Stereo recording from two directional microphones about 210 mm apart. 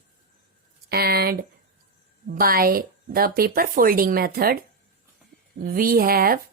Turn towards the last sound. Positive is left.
turn(degrees=-45)  # may be behind; listen again after turning